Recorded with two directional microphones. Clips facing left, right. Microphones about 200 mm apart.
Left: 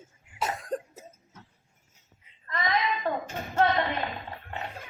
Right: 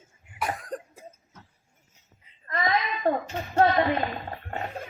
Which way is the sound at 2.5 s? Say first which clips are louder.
Right 1 dB; 35° right (ahead or behind).